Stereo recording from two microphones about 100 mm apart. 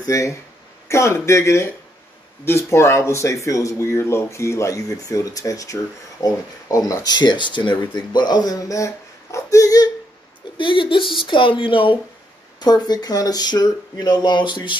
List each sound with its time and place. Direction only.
0.0 s speech: 30° left (ahead or behind)
10.6 s speech: 55° left (ahead or behind)
12.5 s speech: 45° left (ahead or behind)